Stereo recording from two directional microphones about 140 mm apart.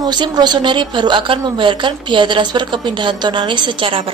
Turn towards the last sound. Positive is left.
turn(degrees=-40)  # may be behind; listen again after turning